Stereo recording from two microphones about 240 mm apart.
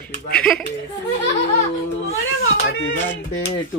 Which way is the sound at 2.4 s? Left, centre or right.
Left.